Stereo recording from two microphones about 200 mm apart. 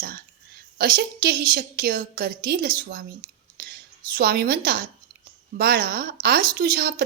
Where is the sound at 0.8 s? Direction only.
50° right (ahead or behind).